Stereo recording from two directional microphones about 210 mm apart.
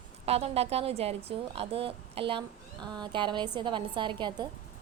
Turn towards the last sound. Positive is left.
turn(degrees=-20)  # may be behind; listen again after turning